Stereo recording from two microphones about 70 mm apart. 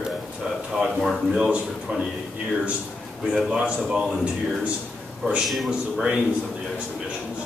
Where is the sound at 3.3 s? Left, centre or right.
Centre.